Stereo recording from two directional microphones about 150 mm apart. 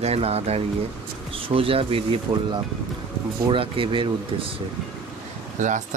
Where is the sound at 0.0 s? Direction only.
45° right (ahead or behind).